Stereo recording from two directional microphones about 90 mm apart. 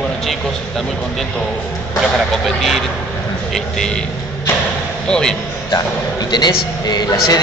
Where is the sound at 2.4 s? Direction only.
Centre (ahead or behind).